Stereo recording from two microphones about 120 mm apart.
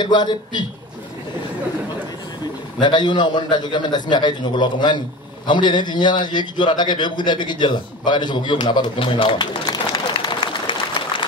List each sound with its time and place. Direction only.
0.0 s a man's voice: 40° left (ahead or behind)
2.8 s a man's voice: 40° left (ahead or behind)